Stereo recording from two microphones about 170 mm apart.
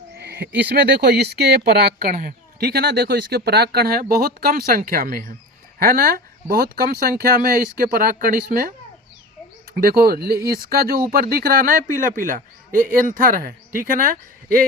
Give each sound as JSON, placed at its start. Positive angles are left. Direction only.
{"t": 0.2, "sound": "speech", "side_deg": -75}
{"t": 9.7, "sound": "speech", "side_deg": -65}